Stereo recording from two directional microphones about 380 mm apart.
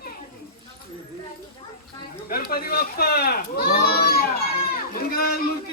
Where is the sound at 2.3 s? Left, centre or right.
Left.